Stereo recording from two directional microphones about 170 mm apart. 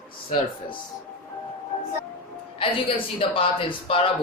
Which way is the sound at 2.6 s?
30° left (ahead or behind).